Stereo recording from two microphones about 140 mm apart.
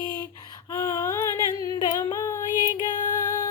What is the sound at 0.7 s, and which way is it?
Female singing, 25° left (ahead or behind).